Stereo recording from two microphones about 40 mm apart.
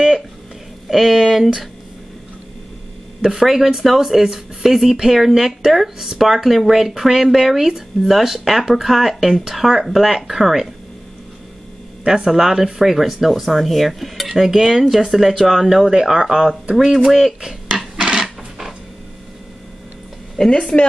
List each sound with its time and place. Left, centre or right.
0.8 s speech: centre
3.3 s speech: centre
12.3 s speech: centre
15.9 s speech: centre
16.7 s speech: centre
17.7 s a sound: centre
20.3 s a woman's voice: centre